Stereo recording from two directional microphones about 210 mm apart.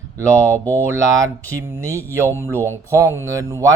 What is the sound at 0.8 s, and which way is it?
Speech, 15° right (ahead or behind).